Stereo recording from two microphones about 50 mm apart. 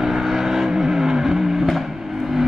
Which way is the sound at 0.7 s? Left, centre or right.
Centre.